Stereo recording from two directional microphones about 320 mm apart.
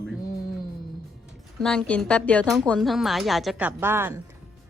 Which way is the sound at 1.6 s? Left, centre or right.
Centre.